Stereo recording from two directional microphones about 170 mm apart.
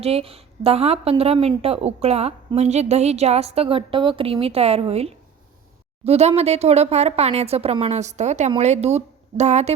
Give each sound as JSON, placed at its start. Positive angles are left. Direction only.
{"t": 0.0, "sound": "a woman's voice", "side_deg": -35}